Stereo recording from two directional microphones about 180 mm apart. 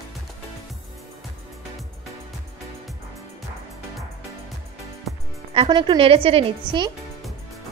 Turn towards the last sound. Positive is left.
turn(degrees=-30)  # may be behind; listen again after turning